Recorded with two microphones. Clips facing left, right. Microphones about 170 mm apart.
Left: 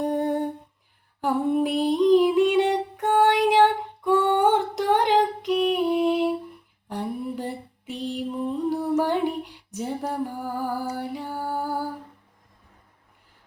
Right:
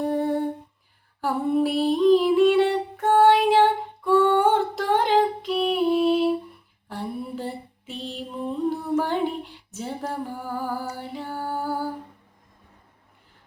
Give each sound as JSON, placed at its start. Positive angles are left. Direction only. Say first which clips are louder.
{"t": 0.0, "sound": "humming", "louder": "even", "side_deg": 20}
{"t": 1.2, "sound": "female singing", "louder": "even", "side_deg": 20}
{"t": 6.8, "sound": "a sound", "louder": "left 2 dB", "side_deg": 15}
{"t": 8.7, "sound": "female singing", "louder": "left 2 dB", "side_deg": 10}